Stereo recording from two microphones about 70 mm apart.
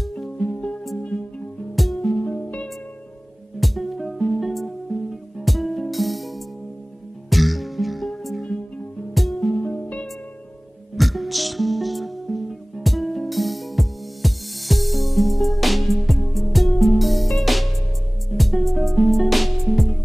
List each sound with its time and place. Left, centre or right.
1.8 s music: centre
2.1 s music: centre
3.5 s music: centre
9.6 s music: centre
11.0 s music: centre